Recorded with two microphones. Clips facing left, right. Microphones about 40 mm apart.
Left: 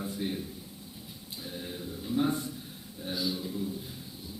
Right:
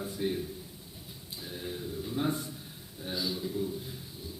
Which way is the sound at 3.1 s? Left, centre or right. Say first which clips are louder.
Left 1 dB; left.